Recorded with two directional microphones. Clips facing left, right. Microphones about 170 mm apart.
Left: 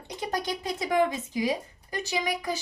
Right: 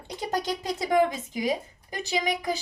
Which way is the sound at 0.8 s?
25° right (ahead or behind).